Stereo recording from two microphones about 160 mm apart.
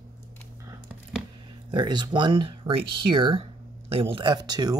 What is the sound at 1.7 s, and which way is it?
Speech, 30° right (ahead or behind).